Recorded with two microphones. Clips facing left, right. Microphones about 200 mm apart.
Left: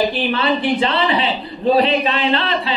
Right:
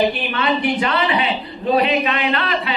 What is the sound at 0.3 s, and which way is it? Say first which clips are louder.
A man's voice: left 2 dB; 30° left (ahead or behind).